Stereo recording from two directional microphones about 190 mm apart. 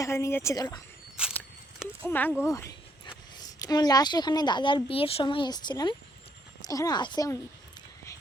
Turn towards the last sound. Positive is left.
turn(degrees=20)  # may be behind; listen again after turning